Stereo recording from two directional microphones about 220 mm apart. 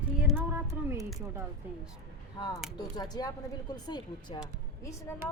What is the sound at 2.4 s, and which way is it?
Speech, 20° left (ahead or behind).